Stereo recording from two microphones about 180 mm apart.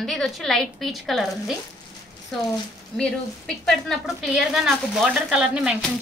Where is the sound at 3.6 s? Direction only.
Centre (ahead or behind).